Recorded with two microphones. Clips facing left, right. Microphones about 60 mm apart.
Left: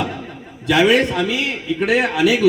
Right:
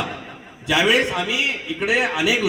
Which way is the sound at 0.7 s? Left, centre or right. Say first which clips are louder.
Left 4 dB; centre.